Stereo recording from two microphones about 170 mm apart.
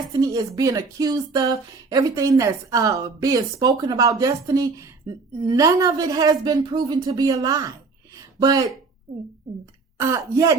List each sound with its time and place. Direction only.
0.2 s speech: 20° right (ahead or behind)
10.0 s speech: 15° right (ahead or behind)